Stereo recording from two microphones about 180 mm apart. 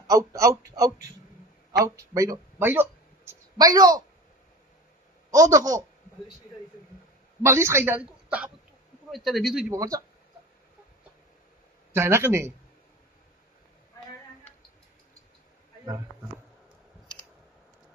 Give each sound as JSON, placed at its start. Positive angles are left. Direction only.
{"t": 0.1, "sound": "a woman's voice", "side_deg": -15}
{"t": 5.3, "sound": "speech", "side_deg": -20}
{"t": 7.4, "sound": "a woman's voice", "side_deg": -15}
{"t": 9.7, "sound": "speech", "side_deg": -20}
{"t": 11.9, "sound": "a woman's voice", "side_deg": -15}